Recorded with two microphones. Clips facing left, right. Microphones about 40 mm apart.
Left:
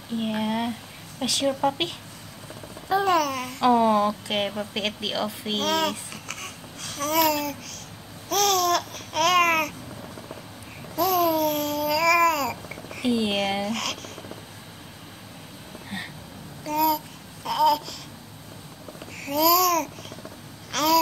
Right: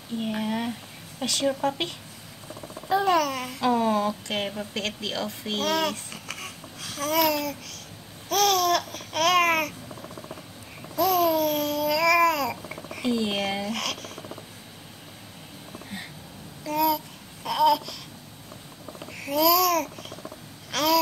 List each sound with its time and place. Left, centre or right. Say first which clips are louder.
0.2 s a woman's voice: left 2 dB; centre
2.9 s babbling: left 1 dB; centre
3.7 s a woman's voice: left 4 dB; centre
5.6 s babbling: left 1 dB; centre
11.0 s babbling: even; centre
13.1 s a woman's voice: left 2 dB; centre
16.6 s babbling: left 1 dB; centre
19.1 s babbling: left 1 dB; centre